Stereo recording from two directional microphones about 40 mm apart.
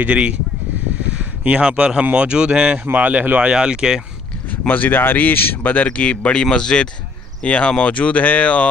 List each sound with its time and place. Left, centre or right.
0.0 s speech: right
1.1 s a sound: right
1.6 s speech: right
2.8 s speech: right
3.3 s speech: right
4.5 s speech: left
5.9 s speech: left
6.4 s speech: centre
7.4 s speech: left